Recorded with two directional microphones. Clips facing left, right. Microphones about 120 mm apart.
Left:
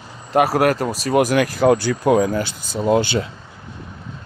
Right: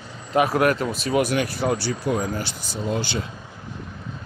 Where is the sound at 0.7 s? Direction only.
35° left (ahead or behind).